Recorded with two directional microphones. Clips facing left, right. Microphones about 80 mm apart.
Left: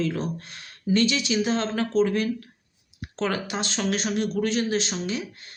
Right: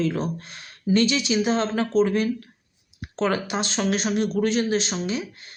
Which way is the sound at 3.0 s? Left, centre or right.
Right.